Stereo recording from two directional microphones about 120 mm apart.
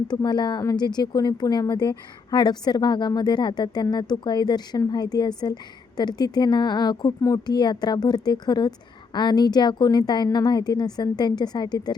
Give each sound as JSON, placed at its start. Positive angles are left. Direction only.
{"t": 0.1, "sound": "a woman's voice", "side_deg": 35}